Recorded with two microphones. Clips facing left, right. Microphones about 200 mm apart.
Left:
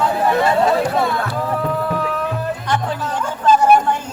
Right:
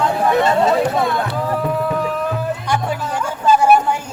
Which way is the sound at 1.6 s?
5° right (ahead or behind).